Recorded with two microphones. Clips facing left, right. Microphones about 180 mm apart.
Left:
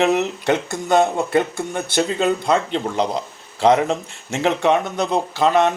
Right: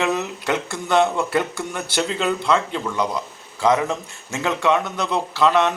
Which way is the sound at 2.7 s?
25° left (ahead or behind).